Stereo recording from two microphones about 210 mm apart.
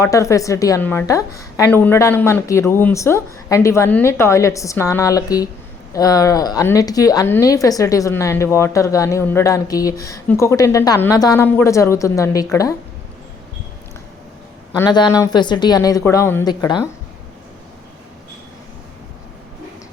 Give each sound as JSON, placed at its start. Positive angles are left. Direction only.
{"t": 0.0, "sound": "a woman's voice", "side_deg": 15}
{"t": 14.8, "sound": "a woman's voice", "side_deg": 20}